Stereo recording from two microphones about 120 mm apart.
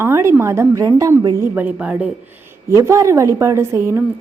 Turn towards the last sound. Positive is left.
turn(degrees=-20)  # may be behind; listen again after turning